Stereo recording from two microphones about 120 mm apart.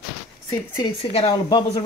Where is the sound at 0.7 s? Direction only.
40° left (ahead or behind).